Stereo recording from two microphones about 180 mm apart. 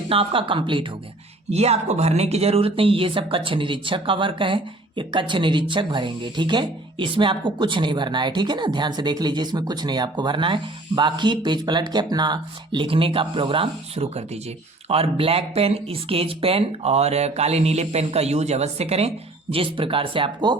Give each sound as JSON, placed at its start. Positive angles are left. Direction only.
{"t": 0.1, "sound": "speech", "side_deg": -30}